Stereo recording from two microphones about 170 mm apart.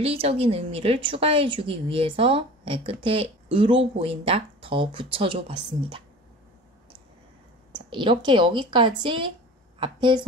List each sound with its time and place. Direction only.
0.0 s a woman's voice: 35° right (ahead or behind)
7.9 s speech: 30° right (ahead or behind)